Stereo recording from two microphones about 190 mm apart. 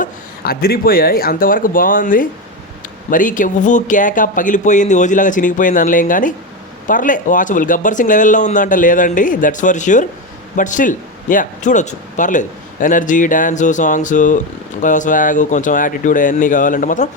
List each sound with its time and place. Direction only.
0.0 s speech: 50° left (ahead or behind)